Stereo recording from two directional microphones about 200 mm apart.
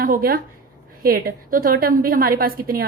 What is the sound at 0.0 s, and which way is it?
A woman's voice, 45° right (ahead or behind).